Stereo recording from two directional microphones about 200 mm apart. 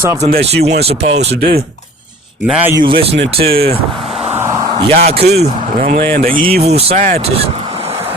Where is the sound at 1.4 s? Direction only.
50° right (ahead or behind).